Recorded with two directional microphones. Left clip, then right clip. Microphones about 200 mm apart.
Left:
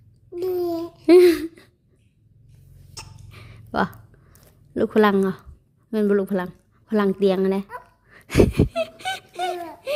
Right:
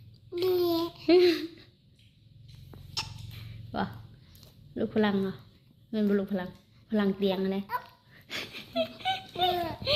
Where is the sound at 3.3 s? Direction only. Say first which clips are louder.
Left 10 dB; 50° left (ahead or behind).